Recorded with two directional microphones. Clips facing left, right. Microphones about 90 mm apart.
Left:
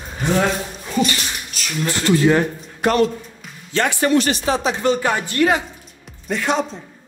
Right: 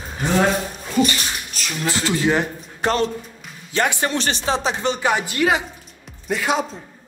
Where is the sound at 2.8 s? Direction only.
30° right (ahead or behind).